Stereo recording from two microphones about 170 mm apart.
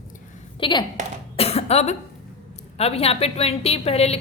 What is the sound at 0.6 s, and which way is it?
A woman's voice, 25° left (ahead or behind).